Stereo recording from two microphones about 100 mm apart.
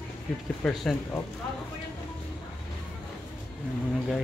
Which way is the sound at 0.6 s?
10° left (ahead or behind).